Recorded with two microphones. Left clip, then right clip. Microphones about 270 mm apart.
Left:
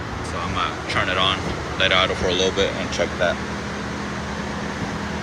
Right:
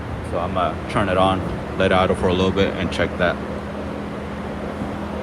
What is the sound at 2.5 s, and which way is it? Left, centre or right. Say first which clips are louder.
Speech: right 1 dB; right.